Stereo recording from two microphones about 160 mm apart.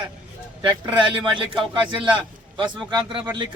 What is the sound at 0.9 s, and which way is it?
Speech, 30° right (ahead or behind).